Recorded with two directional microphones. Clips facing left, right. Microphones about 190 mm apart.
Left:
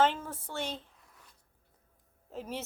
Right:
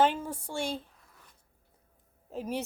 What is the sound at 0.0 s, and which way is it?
Speech, 15° right (ahead or behind).